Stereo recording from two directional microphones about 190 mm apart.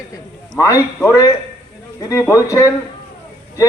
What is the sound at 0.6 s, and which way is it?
A man's voice, 15° left (ahead or behind).